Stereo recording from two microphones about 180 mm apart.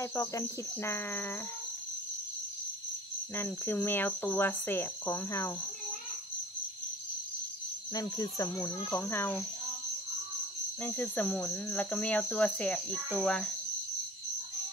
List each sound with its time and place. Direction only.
0.0 s cricket: 15° left (ahead or behind)
3.3 s cricket: 10° left (ahead or behind)
7.9 s cricket: 20° left (ahead or behind)
10.8 s cricket: 10° left (ahead or behind)